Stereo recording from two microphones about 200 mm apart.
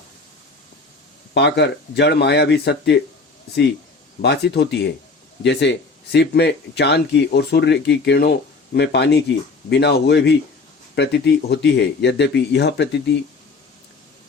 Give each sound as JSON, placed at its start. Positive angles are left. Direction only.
{"t": 1.3, "sound": "speech", "side_deg": 55}
{"t": 4.2, "sound": "speech", "side_deg": 55}